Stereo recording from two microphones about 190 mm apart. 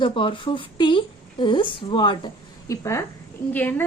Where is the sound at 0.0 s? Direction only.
25° left (ahead or behind).